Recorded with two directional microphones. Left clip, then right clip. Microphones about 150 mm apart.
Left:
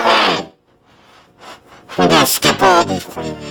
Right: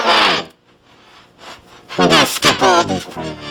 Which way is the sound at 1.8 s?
10° left (ahead or behind).